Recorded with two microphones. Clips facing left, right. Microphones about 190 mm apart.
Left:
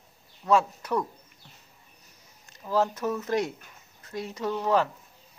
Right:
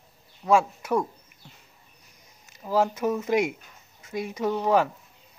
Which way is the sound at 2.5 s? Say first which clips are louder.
Right 2 dB; 10° right (ahead or behind).